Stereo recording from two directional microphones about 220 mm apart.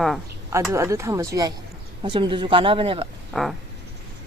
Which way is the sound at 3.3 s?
Centre (ahead or behind).